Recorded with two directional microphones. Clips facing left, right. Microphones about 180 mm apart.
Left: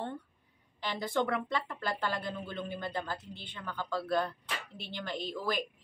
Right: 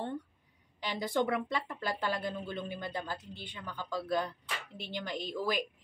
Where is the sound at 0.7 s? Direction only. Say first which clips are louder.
Even; 15° right (ahead or behind).